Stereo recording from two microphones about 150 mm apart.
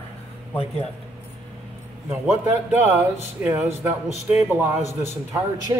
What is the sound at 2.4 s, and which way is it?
A man's voice, 15° right (ahead or behind).